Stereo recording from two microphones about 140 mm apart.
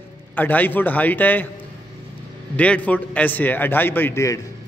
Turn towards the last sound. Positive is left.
turn(degrees=20)  # may be behind; listen again after turning